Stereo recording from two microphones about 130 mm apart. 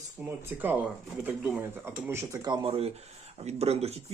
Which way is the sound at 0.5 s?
15° right (ahead or behind).